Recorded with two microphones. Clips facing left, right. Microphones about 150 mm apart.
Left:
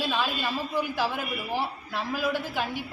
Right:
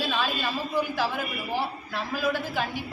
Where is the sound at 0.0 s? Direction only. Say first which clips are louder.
Even; 15° left (ahead or behind).